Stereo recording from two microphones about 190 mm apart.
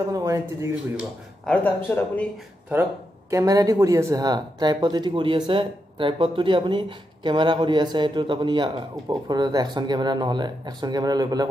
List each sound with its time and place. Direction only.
0.1 s speech: 15° right (ahead or behind)
0.9 s speech: 5° left (ahead or behind)
2.7 s speech: 15° right (ahead or behind)